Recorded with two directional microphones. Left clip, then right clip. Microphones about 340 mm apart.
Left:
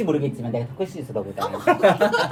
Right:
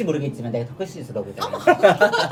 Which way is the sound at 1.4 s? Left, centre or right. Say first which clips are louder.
Right 2 dB; centre.